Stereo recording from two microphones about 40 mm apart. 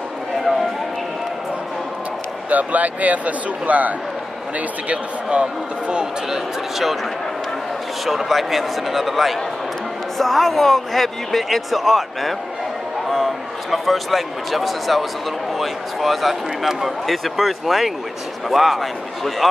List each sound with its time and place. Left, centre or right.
2.5 s speech: right
4.8 s speech: right
8.0 s speech: centre